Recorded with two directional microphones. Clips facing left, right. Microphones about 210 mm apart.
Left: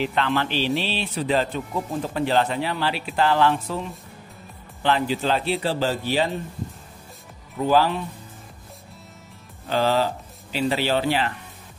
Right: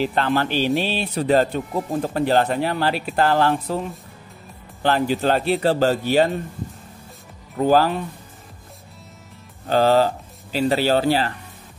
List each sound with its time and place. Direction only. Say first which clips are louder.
0.0 s speech: right 3 dB; 40° right (ahead or behind)
4.8 s speech: right 3 dB; 45° right (ahead or behind)
7.5 s speech: right 3 dB; 40° right (ahead or behind)
9.7 s speech: right 5 dB; 45° right (ahead or behind)